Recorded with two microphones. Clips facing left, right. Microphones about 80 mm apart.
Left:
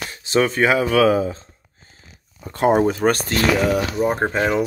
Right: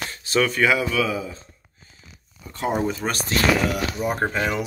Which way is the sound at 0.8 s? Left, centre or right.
Left.